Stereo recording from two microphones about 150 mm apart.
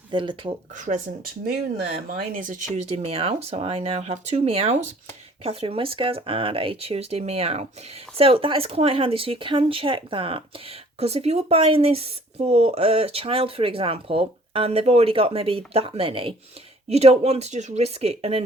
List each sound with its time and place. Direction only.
0.1 s speech: 35° right (ahead or behind)
0.8 s speech: 60° right (ahead or behind)
2.7 s speech: 45° right (ahead or behind)